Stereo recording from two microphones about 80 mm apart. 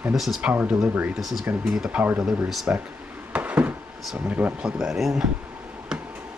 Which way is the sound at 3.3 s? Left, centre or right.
Centre.